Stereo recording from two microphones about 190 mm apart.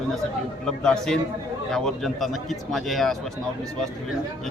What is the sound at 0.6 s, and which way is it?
Speech, 5° left (ahead or behind).